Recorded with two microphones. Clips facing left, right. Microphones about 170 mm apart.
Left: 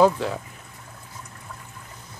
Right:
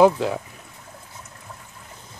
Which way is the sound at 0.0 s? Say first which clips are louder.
Right 3 dB; 15° right (ahead or behind).